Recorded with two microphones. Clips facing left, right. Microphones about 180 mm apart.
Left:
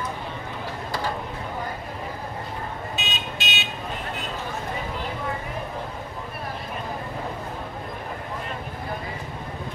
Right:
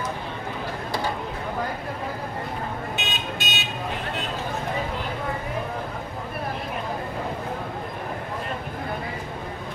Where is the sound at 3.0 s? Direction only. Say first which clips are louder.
Right 2 dB; 50° right (ahead or behind).